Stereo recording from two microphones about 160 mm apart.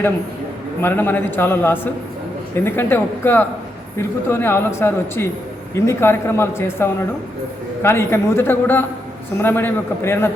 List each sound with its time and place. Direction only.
0.8 s a woman's voice: 15° left (ahead or behind)